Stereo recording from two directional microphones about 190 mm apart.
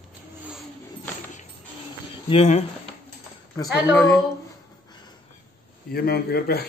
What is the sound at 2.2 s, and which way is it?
Speech, 30° left (ahead or behind).